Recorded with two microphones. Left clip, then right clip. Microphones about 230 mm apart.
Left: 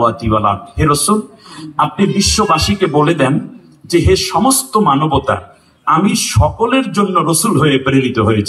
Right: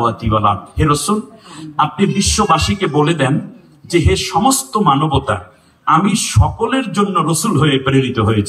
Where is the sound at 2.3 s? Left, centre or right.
Left.